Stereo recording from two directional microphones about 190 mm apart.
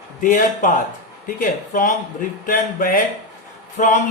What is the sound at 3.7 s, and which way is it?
Speech, 40° left (ahead or behind).